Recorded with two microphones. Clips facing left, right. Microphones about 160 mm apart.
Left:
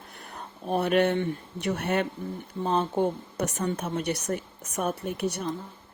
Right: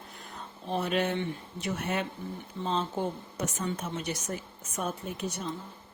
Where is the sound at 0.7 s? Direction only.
60° left (ahead or behind).